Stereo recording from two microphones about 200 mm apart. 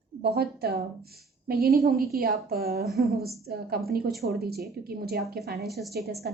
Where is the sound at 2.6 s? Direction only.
50° right (ahead or behind).